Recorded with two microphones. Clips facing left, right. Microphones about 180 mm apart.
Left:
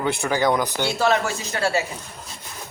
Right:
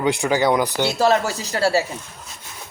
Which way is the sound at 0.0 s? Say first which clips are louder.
Right 3 dB; 15° right (ahead or behind).